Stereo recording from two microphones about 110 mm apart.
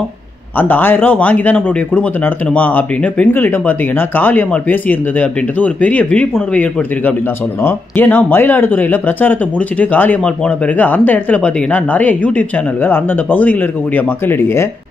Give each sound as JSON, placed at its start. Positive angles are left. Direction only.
{"t": 0.6, "sound": "speech", "side_deg": 20}